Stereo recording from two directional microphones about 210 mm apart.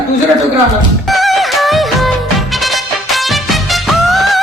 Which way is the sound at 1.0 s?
Centre (ahead or behind).